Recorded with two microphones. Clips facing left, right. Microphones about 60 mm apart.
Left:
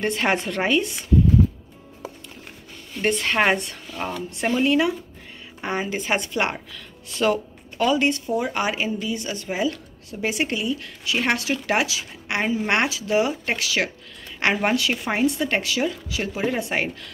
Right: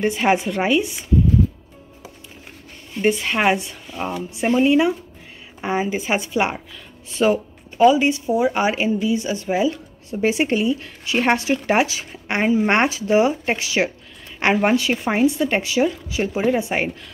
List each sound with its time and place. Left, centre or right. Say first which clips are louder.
0.0 s speech: right 4 dB; centre
2.9 s speech: right 3 dB; centre